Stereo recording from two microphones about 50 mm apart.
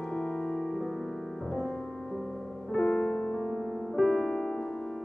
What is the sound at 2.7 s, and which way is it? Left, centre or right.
Music, centre.